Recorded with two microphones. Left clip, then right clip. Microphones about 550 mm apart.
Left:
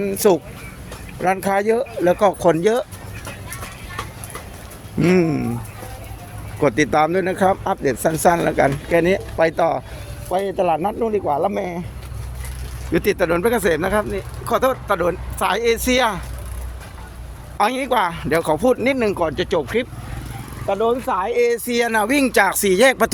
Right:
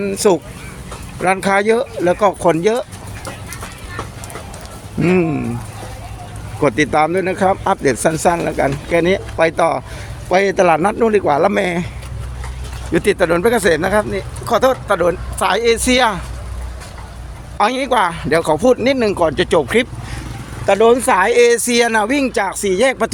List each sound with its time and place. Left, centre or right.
0.0 s speech: left
5.0 s speech: left
6.6 s a man's voice: left
12.9 s speech: left
17.6 s speech: left